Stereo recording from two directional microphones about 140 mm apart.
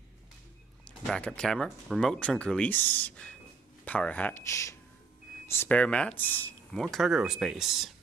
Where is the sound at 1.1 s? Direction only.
5° left (ahead or behind).